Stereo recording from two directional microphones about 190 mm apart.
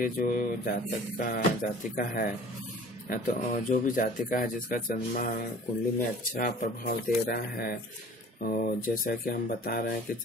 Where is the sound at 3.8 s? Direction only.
45° left (ahead or behind).